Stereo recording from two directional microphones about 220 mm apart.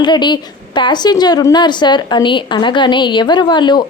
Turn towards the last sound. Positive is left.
turn(degrees=20)  # may be behind; listen again after turning